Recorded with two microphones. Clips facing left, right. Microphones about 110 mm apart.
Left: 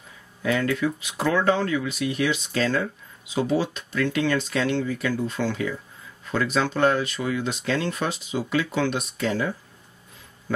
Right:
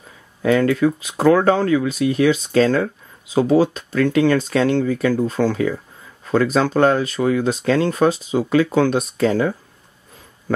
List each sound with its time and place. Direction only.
0.4 s speech: 40° right (ahead or behind)